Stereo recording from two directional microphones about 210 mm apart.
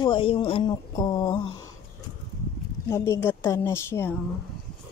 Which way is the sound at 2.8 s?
15° left (ahead or behind).